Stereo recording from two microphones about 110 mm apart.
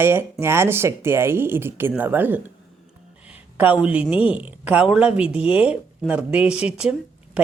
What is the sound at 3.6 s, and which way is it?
Speech, 10° right (ahead or behind).